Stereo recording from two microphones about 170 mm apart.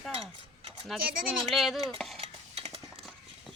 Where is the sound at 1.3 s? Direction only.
Centre (ahead or behind).